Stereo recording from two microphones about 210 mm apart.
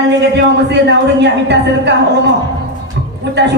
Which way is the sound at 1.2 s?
55° right (ahead or behind).